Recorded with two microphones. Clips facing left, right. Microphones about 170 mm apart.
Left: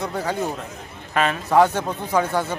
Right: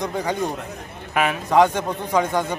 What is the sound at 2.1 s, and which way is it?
Speech, 10° left (ahead or behind).